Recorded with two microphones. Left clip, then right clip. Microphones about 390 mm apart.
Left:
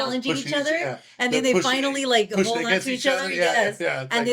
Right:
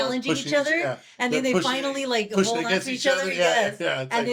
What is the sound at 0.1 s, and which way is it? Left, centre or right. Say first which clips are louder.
Speech: right 1 dB; centre.